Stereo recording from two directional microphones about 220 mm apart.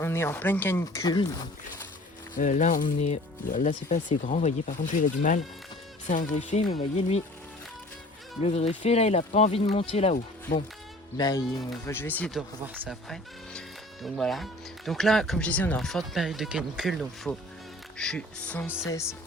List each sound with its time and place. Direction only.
0.0 s speech: 10° left (ahead or behind)
2.4 s speech: 35° left (ahead or behind)
8.4 s speech: 30° left (ahead or behind)
11.2 s speech: 15° left (ahead or behind)
12.6 s speech: 10° right (ahead or behind)